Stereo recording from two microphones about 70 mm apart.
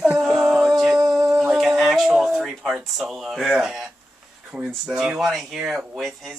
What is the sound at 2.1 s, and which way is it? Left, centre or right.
Speech, centre.